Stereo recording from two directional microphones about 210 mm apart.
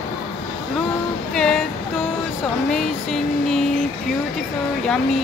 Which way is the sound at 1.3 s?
5° left (ahead or behind).